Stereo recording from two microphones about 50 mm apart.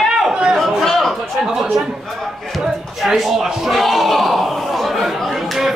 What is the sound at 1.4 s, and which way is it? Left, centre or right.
Speech, centre.